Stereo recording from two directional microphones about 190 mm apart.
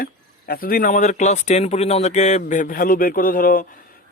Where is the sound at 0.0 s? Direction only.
50° left (ahead or behind).